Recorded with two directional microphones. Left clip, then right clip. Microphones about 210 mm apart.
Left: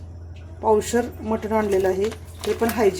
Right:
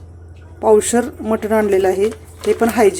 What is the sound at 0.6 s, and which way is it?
Speech, 40° right (ahead or behind).